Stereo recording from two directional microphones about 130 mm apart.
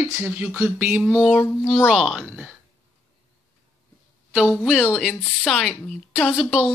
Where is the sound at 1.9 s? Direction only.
5° right (ahead or behind).